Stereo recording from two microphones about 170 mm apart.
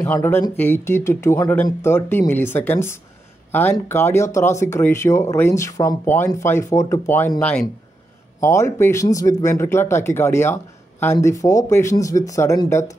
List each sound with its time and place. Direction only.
0.0 s speech: 15° left (ahead or behind)
8.4 s speech: 15° left (ahead or behind)